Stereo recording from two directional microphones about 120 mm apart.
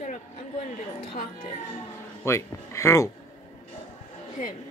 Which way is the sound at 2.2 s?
20° left (ahead or behind).